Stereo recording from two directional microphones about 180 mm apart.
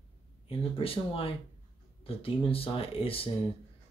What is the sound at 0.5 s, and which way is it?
Speech, 30° left (ahead or behind).